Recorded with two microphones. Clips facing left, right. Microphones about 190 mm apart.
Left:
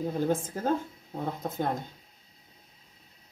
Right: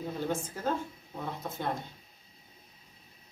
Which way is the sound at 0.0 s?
40° left (ahead or behind).